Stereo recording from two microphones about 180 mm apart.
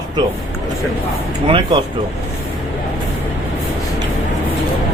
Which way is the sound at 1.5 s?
30° right (ahead or behind).